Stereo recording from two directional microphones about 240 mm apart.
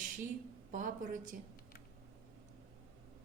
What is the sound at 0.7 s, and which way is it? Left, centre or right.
Speech, right.